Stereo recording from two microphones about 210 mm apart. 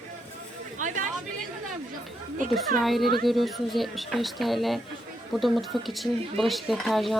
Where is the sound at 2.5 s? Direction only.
Centre (ahead or behind).